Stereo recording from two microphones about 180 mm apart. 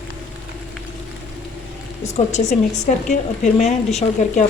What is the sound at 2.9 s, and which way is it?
A woman's voice, 40° left (ahead or behind).